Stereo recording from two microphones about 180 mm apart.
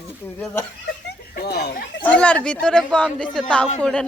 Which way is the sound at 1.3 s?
60° left (ahead or behind).